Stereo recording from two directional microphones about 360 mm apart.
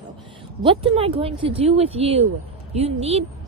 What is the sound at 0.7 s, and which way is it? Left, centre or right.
A woman's voice, centre.